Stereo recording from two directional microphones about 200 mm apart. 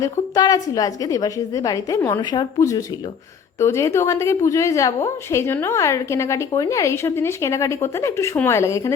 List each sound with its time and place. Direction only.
0.0 s a woman's voice: 20° left (ahead or behind)